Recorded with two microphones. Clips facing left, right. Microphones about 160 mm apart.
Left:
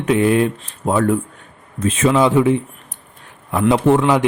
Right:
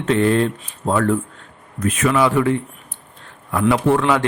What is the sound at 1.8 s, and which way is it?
Speech, 25° left (ahead or behind).